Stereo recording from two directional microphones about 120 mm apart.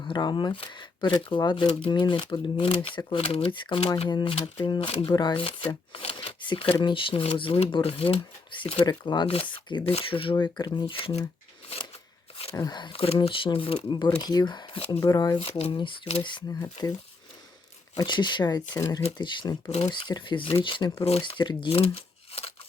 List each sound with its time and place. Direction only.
0.0 s speech: 40° left (ahead or behind); by 4.1 s 55° left (ahead or behind)
4.1 s speech: 40° left (ahead or behind)
5.6 s shuffling cards: 50° left (ahead or behind)
6.7 s speech: 40° left (ahead or behind)
9.8 s speech: 50° left (ahead or behind)
12.5 s speech: 35° left (ahead or behind); by 13.9 s 50° left (ahead or behind)
13.9 s speech: 35° left (ahead or behind)
15.4 s speech: 55° left (ahead or behind)
16.5 s speech: 25° left (ahead or behind)
17.9 s speech: 40° left (ahead or behind); by 22.5 s 55° left (ahead or behind)